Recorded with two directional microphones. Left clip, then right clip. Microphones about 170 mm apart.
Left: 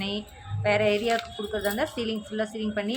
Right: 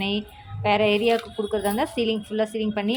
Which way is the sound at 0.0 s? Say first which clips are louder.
Right 5 dB; 15° right (ahead or behind).